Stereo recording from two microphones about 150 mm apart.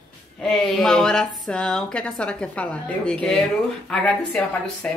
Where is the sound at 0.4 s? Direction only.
5° left (ahead or behind).